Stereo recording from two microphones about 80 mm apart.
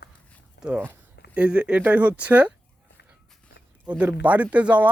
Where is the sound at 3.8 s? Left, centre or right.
Centre.